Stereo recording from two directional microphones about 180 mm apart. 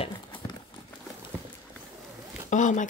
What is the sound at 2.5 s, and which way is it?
Speech, 45° left (ahead or behind).